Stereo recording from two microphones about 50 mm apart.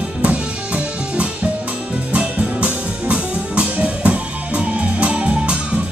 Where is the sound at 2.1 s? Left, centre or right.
Right.